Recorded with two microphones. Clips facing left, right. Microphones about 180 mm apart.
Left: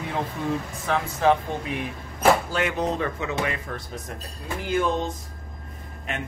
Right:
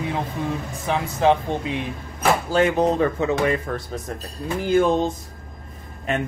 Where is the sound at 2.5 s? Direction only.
35° right (ahead or behind).